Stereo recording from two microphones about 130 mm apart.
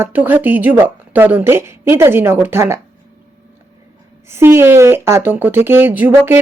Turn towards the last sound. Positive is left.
turn(degrees=-15)  # may be behind; listen again after turning